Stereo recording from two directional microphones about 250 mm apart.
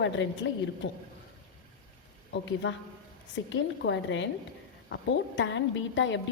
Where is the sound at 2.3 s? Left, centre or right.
Left.